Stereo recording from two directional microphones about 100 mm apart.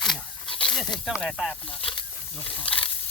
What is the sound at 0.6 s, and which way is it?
Speech, centre (ahead or behind).